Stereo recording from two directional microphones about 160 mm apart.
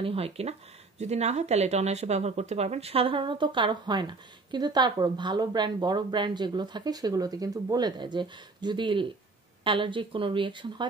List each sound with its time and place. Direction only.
0.0 s speech: 35° right (ahead or behind)